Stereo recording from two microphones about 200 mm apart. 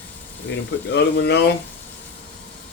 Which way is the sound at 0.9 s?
55° left (ahead or behind).